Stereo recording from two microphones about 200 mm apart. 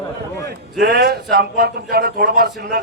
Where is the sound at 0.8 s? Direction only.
55° right (ahead or behind).